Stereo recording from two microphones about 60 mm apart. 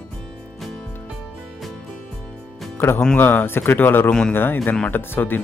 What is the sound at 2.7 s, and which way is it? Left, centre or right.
Speech, left.